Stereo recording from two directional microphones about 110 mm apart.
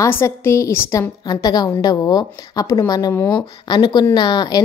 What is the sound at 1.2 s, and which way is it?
A woman's voice, 40° left (ahead or behind).